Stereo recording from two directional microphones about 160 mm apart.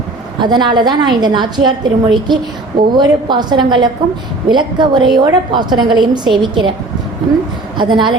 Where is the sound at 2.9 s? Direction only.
25° right (ahead or behind).